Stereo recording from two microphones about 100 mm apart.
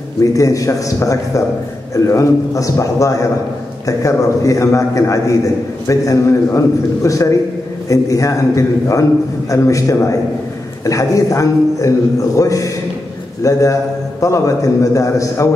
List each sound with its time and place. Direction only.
0.2 s a man's voice: 35° left (ahead or behind)